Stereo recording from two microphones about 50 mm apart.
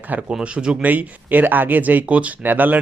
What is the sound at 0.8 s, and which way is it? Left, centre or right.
Speech, right.